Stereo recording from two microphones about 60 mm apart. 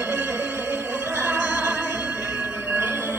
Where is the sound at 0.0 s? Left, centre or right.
Right.